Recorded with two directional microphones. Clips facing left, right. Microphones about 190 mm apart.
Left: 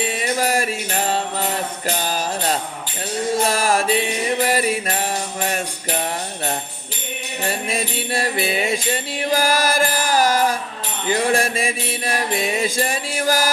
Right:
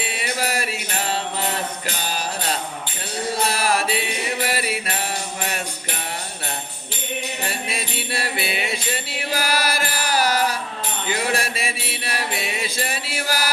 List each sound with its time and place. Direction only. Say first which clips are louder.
0.0 s music: left 5 dB; 45° left (ahead or behind)
2.0 s music: left 2 dB; 45° left (ahead or behind)
7.7 s music: left 5 dB; 45° left (ahead or behind)